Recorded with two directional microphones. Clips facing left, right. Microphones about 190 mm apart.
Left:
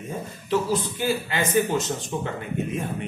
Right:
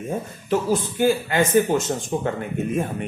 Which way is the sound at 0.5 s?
50° right (ahead or behind).